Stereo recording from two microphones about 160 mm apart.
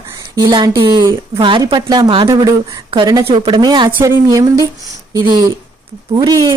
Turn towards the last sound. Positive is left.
turn(degrees=-25)  # may be behind; listen again after turning